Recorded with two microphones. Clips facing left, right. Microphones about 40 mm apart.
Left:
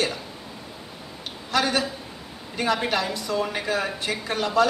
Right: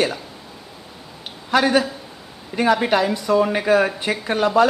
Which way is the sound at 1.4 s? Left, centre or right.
Right.